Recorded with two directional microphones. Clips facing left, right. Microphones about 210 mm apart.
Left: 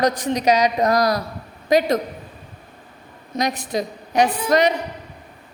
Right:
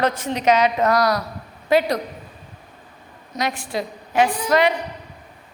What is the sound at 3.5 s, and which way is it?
Speech, 20° left (ahead or behind).